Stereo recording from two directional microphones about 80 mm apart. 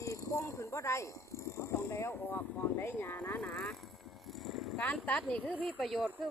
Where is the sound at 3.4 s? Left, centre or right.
Centre.